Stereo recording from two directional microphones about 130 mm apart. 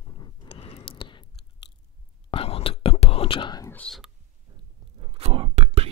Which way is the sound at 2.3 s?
45° left (ahead or behind).